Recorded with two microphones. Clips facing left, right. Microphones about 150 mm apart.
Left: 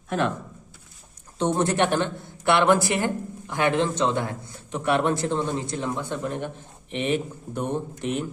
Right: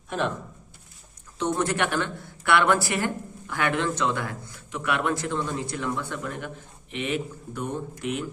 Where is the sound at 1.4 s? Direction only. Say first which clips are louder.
Left 3 dB; 30° left (ahead or behind).